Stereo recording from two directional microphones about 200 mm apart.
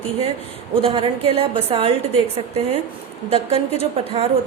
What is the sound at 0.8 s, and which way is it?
A woman's voice, 25° right (ahead or behind).